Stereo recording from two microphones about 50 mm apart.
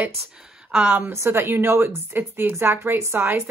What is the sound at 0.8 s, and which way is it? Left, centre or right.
Speech, right.